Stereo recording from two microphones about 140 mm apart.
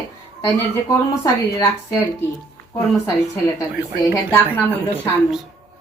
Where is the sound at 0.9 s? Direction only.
25° left (ahead or behind).